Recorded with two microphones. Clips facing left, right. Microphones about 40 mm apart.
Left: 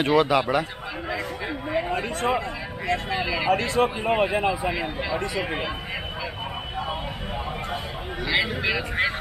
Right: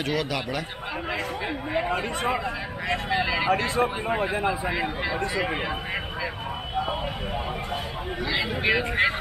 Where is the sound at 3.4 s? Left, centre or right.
Right.